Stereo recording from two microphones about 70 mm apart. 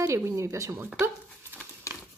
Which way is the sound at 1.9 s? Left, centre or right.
Right.